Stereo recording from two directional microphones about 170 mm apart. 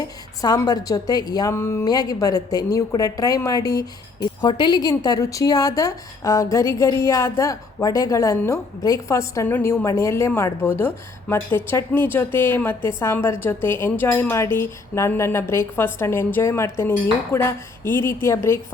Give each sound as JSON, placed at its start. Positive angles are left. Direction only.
{"t": 0.0, "sound": "a woman's voice", "side_deg": 20}